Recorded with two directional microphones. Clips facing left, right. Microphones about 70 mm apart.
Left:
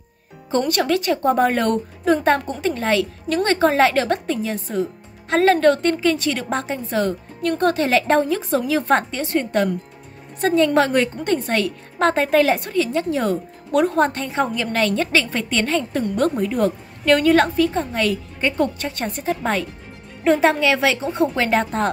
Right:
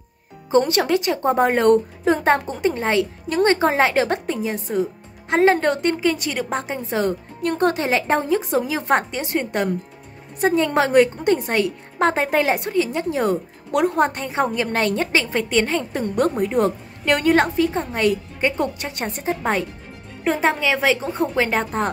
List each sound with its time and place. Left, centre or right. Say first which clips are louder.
0.7 s a woman's voice: even; right
6.9 s a woman's voice: right 1 dB; right
20.2 s a woman's voice: left 3 dB; centre